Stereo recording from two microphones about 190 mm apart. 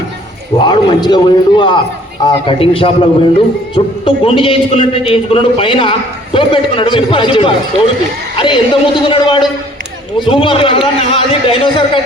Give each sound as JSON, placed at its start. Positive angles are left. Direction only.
{"t": 0.6, "sound": "a man's voice", "side_deg": 20}